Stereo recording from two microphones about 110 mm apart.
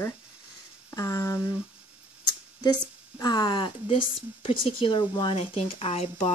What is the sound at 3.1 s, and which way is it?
Speech, 40° left (ahead or behind).